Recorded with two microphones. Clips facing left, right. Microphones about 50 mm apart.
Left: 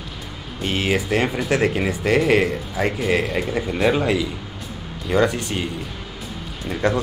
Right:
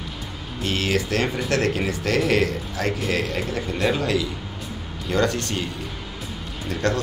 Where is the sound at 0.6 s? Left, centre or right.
Centre.